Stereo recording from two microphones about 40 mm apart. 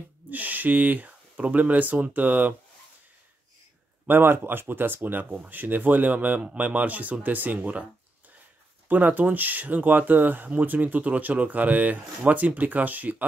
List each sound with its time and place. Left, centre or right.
0.3 s speech: right
4.1 s speech: right
8.8 s speech: right